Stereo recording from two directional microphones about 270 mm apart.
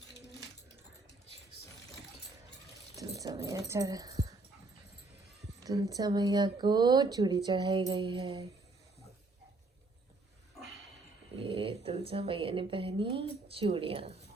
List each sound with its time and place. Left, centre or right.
3.2 s speech: centre
5.6 s speech: centre
11.4 s speech: right